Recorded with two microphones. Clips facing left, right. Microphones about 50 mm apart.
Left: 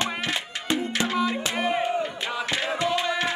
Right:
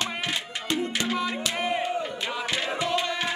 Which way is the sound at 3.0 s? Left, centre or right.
Centre.